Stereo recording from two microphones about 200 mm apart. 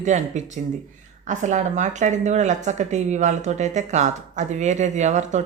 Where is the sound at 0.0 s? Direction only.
35° right (ahead or behind).